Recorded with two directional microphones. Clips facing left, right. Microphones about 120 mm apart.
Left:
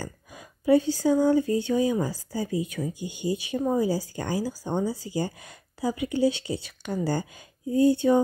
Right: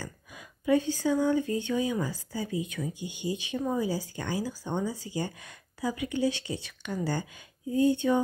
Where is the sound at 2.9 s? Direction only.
20° right (ahead or behind).